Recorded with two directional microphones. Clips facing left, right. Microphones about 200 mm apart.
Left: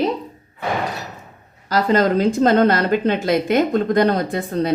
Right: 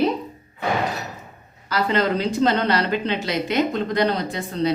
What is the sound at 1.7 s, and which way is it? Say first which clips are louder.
Speech: left 4 dB; 45° left (ahead or behind).